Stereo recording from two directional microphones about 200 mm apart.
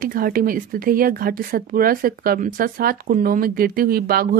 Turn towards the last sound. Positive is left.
turn(degrees=-50)  # may be behind; listen again after turning